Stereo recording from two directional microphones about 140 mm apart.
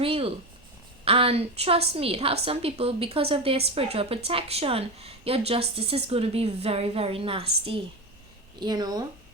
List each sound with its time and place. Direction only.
0.0 s a sound: 40° right (ahead or behind)
1.0 s a woman's voice: 45° right (ahead or behind)
8.5 s speech: 30° right (ahead or behind)